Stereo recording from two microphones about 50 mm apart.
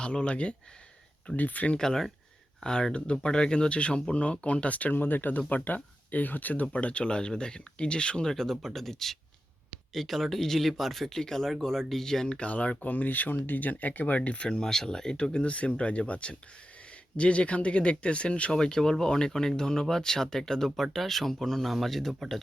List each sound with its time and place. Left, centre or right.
0.0 s speech: left
1.4 s speech: left
1.7 s speech: centre
12.4 s speech: left; by 22.4 s centre